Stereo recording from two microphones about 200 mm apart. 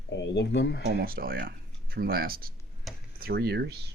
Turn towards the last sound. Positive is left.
turn(degrees=-55)  # may be behind; listen again after turning